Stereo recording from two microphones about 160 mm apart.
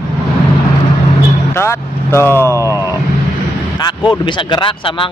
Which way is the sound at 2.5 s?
20° right (ahead or behind).